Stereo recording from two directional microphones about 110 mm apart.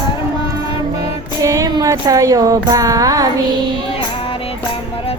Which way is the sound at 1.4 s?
30° right (ahead or behind).